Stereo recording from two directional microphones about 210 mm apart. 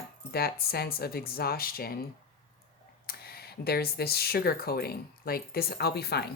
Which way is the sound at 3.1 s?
45° left (ahead or behind).